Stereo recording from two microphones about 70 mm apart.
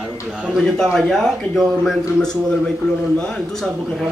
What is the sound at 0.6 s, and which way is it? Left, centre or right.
Speech, centre.